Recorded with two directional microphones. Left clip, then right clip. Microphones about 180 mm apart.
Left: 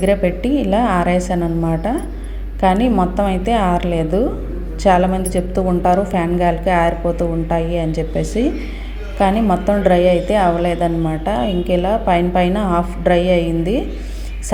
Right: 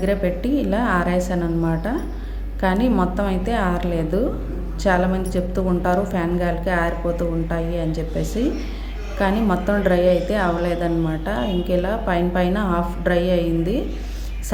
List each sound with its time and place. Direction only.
0.0 s a woman's voice: 15° left (ahead or behind)